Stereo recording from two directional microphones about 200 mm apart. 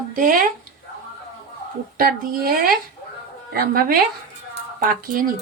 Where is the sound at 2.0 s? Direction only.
50° right (ahead or behind).